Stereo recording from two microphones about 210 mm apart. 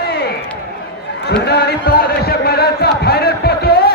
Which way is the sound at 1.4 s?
50° left (ahead or behind).